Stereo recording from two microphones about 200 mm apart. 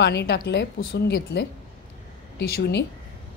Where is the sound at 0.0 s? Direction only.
55° left (ahead or behind).